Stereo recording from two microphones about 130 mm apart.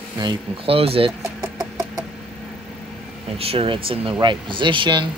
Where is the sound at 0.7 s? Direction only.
45° right (ahead or behind).